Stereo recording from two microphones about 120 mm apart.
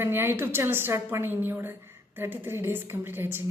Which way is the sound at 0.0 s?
20° right (ahead or behind).